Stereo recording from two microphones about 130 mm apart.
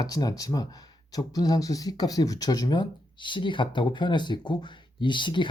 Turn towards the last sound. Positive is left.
turn(degrees=40)  # may be behind; listen again after turning